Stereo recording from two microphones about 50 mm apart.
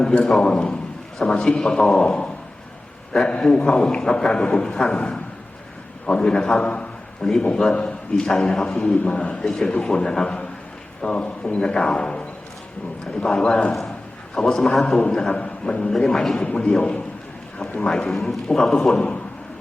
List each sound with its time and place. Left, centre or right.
0.0 s a man's voice: centre
3.4 s a man's voice: centre
9.4 s a man's voice: centre
16.5 s a man's voice: centre
18.1 s a man's voice: centre